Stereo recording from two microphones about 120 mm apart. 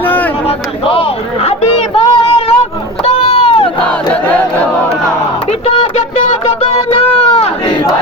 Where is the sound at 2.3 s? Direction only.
55° left (ahead or behind).